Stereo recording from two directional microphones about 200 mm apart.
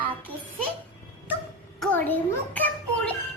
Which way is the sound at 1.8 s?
10° left (ahead or behind).